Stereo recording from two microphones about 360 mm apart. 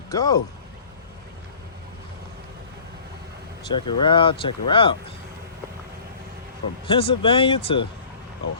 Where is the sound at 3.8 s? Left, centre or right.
Left.